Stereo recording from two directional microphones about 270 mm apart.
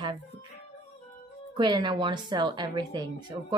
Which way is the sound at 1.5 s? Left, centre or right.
Centre.